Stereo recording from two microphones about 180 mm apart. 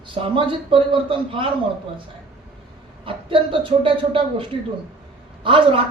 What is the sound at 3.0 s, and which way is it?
Speech, 30° right (ahead or behind).